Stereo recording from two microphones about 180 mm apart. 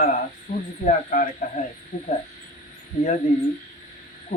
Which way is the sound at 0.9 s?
45° left (ahead or behind).